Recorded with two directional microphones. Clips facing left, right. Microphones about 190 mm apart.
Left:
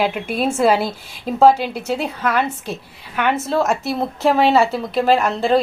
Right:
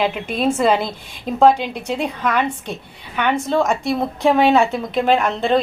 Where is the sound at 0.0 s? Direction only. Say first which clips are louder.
Even; 5° left (ahead or behind).